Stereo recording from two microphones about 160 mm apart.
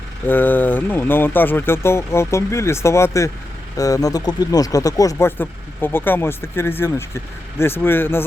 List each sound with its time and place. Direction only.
0.3 s speech: 10° left (ahead or behind)